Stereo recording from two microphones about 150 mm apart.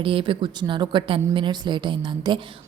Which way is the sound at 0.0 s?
35° right (ahead or behind).